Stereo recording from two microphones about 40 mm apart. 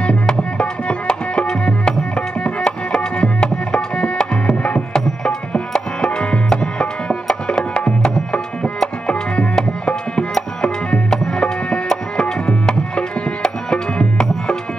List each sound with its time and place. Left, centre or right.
0.0 s music: left
11.1 s tabla: centre